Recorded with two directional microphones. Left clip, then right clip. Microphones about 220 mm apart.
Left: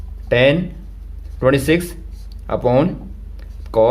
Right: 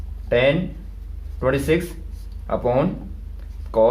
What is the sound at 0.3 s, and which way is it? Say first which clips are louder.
A man's voice: left 4 dB; 50° left (ahead or behind).